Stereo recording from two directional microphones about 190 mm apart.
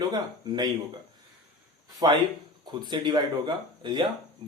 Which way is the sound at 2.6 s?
20° right (ahead or behind).